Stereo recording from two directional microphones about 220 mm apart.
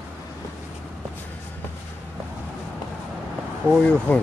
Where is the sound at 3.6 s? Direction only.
5° left (ahead or behind).